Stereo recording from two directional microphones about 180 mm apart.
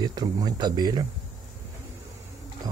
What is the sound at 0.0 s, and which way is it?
Speech, 20° right (ahead or behind).